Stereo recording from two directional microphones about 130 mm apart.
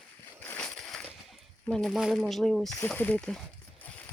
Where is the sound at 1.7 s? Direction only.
Centre (ahead or behind).